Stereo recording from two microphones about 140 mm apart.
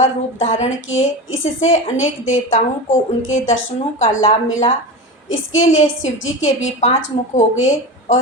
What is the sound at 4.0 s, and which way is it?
Speech, 60° left (ahead or behind).